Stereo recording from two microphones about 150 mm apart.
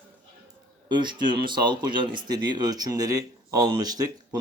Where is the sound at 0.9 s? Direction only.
30° right (ahead or behind).